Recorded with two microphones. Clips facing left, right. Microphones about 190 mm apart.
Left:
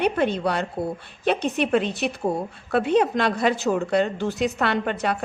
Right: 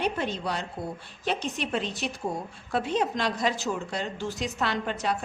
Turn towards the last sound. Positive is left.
turn(degrees=60)  # may be behind; listen again after turning